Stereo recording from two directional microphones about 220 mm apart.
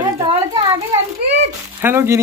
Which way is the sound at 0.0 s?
15° right (ahead or behind).